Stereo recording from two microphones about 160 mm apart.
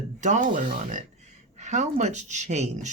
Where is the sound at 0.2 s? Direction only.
50° right (ahead or behind).